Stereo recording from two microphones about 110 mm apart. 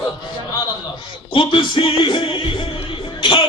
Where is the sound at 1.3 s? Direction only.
50° left (ahead or behind).